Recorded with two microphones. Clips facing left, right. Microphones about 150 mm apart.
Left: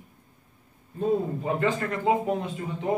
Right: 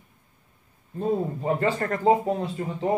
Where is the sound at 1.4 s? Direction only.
40° right (ahead or behind).